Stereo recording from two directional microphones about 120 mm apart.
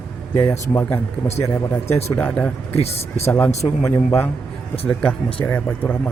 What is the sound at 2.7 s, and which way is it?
Speech, 60° left (ahead or behind).